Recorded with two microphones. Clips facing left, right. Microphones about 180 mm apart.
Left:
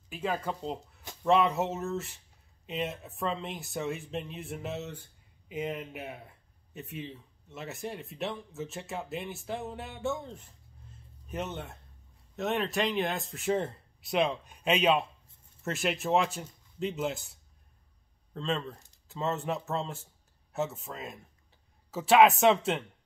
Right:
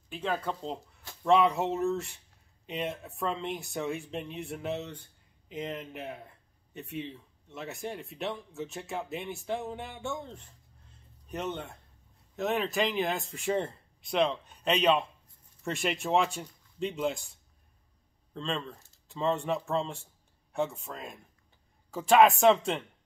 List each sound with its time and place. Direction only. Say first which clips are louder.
0.1 s speech: even; 5° left (ahead or behind)
18.3 s speech: left 2 dB; centre (ahead or behind)